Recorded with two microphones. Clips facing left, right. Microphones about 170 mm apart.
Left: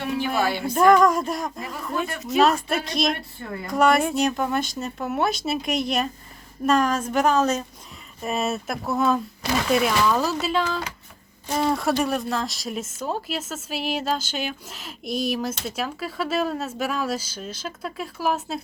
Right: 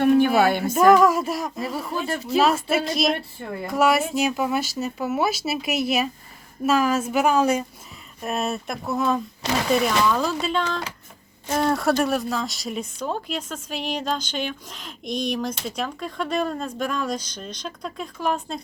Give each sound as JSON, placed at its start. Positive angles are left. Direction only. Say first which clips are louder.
{"t": 0.0, "sound": "a woman's voice", "louder": "right 7 dB", "side_deg": -55}
{"t": 0.7, "sound": "speech", "louder": "even", "side_deg": -5}
{"t": 1.7, "sound": "speech", "louder": "right 1 dB", "side_deg": -30}
{"t": 2.4, "sound": "speech", "louder": "left 1 dB", "side_deg": -5}
{"t": 8.2, "sound": "speech", "louder": "left 1 dB", "side_deg": 0}